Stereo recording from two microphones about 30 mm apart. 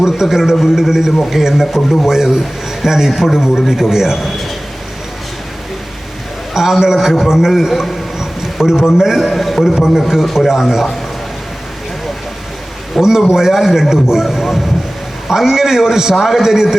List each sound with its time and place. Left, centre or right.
0.0 s a man's voice: centre
6.5 s a man's voice: centre
7.7 s a man's voice: centre
8.6 s a man's voice: centre
9.1 s a man's voice: centre
9.7 s a man's voice: centre
13.0 s a man's voice: centre
14.3 s a man's voice: centre
15.3 s a man's voice: centre